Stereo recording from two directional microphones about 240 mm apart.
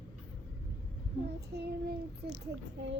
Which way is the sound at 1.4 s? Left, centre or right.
Right.